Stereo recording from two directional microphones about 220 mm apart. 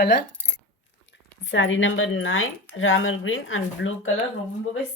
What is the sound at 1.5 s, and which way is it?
Speech, 60° left (ahead or behind).